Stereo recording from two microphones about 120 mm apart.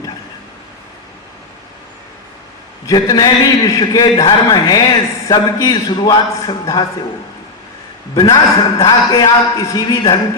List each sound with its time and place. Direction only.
2.8 s a man's voice: 35° left (ahead or behind)
8.1 s a man's voice: 30° left (ahead or behind)